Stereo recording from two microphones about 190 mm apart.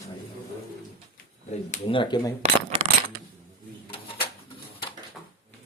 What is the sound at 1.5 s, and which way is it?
Speech, 35° left (ahead or behind).